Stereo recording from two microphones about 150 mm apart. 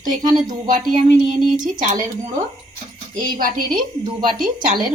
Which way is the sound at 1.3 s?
60° right (ahead or behind).